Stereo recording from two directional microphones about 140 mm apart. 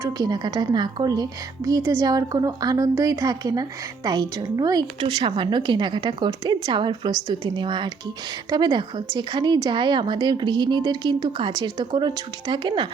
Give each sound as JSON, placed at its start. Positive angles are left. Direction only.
{"t": 0.0, "sound": "a woman's voice", "side_deg": -30}